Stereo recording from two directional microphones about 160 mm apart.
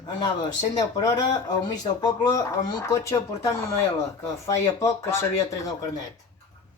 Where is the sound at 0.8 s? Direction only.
25° left (ahead or behind).